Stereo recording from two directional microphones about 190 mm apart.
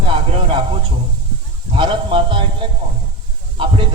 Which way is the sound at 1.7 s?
25° right (ahead or behind).